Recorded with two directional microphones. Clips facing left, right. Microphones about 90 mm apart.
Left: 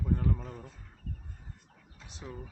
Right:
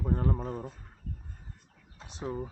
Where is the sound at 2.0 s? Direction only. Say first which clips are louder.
Right 9 dB; 35° right (ahead or behind).